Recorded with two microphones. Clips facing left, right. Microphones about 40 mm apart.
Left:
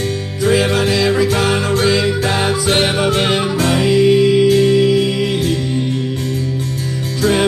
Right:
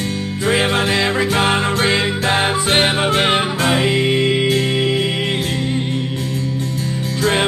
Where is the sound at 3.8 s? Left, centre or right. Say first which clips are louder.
Left 5 dB; right.